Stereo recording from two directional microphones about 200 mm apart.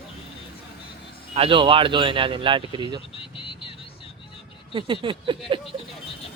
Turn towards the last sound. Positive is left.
turn(degrees=-25)  # may be behind; listen again after turning